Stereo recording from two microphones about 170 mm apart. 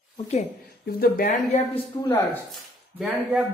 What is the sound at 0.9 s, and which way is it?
Speech, 60° left (ahead or behind).